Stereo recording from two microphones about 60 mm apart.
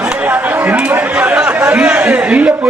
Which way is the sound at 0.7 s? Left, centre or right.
Right.